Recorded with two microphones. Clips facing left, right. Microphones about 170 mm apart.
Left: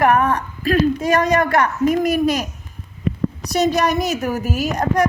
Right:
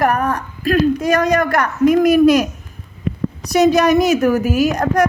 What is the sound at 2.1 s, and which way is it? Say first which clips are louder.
Speech: right 7 dB; 50° right (ahead or behind).